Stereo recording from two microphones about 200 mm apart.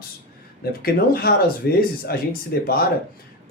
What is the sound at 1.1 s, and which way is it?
Speech, 45° left (ahead or behind).